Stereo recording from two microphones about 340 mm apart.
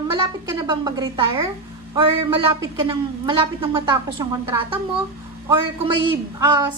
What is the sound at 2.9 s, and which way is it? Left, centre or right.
A woman's voice, centre.